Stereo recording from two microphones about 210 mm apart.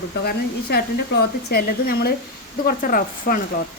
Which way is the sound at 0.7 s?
50° left (ahead or behind).